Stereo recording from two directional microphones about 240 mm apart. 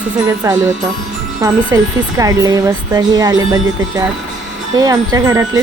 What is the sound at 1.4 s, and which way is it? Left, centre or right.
Speech, centre.